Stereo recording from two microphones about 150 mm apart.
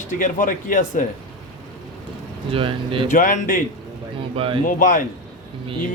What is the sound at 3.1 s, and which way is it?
Speech, 65° left (ahead or behind).